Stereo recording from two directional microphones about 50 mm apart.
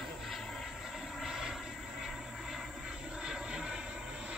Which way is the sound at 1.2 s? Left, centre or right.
Centre.